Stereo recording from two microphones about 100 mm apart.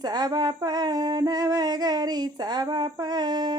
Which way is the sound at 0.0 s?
45° right (ahead or behind).